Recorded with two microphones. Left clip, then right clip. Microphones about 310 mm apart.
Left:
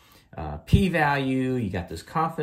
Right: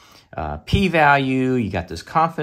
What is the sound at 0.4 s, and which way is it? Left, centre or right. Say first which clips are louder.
Speech: right 5 dB; right.